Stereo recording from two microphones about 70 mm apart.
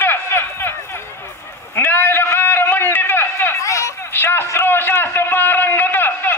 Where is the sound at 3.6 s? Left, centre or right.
Left.